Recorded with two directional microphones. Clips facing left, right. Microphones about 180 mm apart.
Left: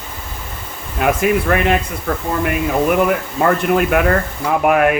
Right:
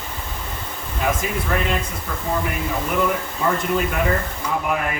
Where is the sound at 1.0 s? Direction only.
65° left (ahead or behind).